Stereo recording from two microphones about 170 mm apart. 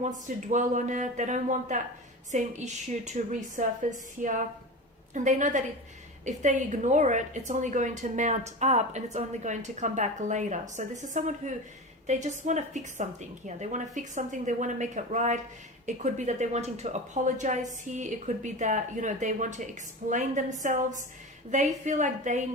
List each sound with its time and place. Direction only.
0.3 s a woman's voice: 45° right (ahead or behind)